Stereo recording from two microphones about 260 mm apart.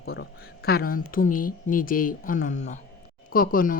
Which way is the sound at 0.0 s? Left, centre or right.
Left.